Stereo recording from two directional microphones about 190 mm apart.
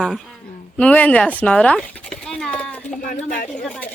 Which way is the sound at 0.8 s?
5° left (ahead or behind).